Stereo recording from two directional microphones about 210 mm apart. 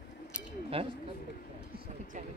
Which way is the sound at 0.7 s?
25° right (ahead or behind).